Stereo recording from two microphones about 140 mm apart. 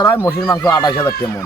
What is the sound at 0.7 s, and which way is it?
Speech, 30° left (ahead or behind).